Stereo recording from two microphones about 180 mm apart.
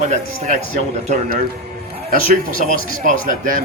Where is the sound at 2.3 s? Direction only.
50° right (ahead or behind).